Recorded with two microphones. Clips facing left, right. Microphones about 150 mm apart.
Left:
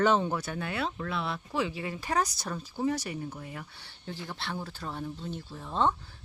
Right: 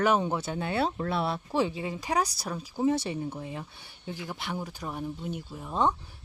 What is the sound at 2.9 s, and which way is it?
Speech, 25° right (ahead or behind).